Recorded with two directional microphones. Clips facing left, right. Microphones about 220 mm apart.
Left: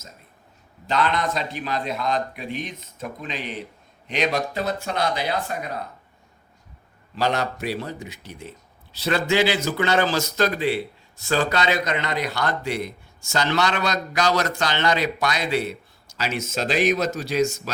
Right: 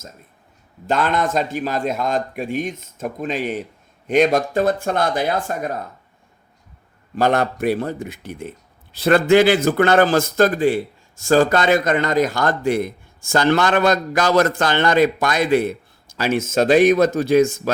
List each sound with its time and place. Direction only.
0.9 s speech: 50° right (ahead or behind)
7.2 s speech: 50° right (ahead or behind)